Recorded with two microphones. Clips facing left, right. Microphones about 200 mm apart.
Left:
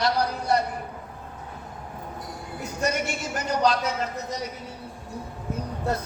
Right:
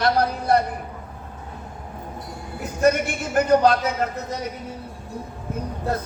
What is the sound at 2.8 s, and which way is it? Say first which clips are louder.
A man's voice: right 8 dB; 55° right (ahead or behind).